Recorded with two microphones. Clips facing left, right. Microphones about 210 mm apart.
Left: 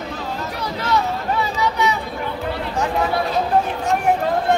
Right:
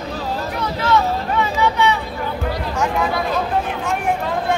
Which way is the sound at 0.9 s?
40° left (ahead or behind).